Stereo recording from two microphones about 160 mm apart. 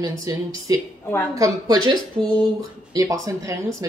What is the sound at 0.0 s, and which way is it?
Speech, 20° right (ahead or behind).